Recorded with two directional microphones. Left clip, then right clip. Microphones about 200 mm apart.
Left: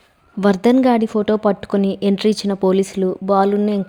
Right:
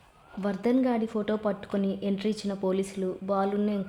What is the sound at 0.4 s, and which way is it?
Speech, 45° left (ahead or behind).